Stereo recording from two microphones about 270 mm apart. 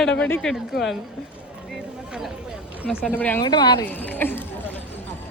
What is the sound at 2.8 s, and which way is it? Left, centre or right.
Speech, centre.